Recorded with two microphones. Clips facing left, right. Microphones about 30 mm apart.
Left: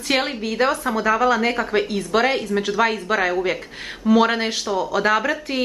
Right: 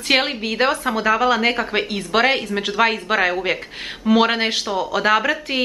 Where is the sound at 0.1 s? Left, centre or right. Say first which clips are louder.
Right 3 dB; right.